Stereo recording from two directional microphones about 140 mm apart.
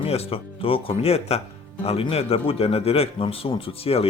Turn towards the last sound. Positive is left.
turn(degrees=45)  # may be behind; listen again after turning